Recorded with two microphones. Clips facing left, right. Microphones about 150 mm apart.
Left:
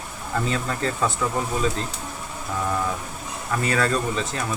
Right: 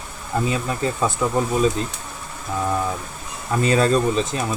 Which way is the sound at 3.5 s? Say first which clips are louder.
Right 5 dB; 20° right (ahead or behind).